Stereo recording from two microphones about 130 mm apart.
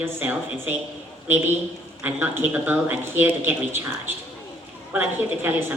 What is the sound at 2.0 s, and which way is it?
Speech, 15° right (ahead or behind).